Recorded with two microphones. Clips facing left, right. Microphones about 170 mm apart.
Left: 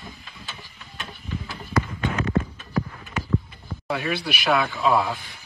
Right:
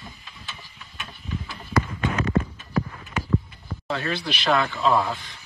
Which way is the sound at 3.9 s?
10° left (ahead or behind).